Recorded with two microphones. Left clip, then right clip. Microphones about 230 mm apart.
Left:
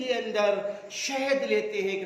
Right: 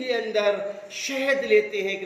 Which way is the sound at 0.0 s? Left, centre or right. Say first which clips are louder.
Right 3 dB; left.